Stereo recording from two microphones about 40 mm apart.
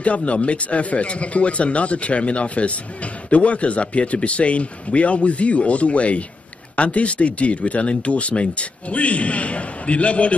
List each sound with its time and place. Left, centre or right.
0.0 s speech: left